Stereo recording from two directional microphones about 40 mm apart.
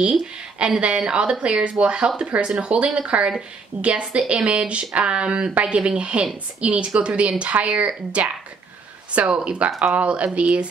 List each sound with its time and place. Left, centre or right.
0.0 s speech: right